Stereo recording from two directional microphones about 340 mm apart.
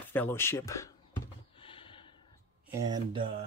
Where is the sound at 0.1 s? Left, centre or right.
Centre.